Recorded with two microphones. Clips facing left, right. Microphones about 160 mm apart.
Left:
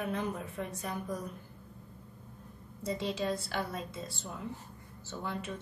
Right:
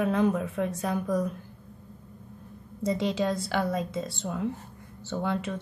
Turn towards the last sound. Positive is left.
turn(degrees=-90)